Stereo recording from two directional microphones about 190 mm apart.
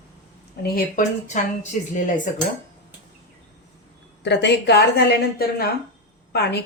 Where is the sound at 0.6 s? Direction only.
50° left (ahead or behind).